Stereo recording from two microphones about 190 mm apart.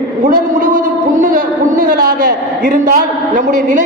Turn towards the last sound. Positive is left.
turn(degrees=-40)  # may be behind; listen again after turning